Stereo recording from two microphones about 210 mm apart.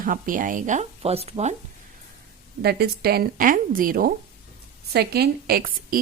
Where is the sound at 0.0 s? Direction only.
40° right (ahead or behind).